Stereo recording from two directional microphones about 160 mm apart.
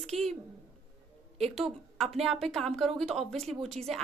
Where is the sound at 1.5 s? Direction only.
Centre (ahead or behind).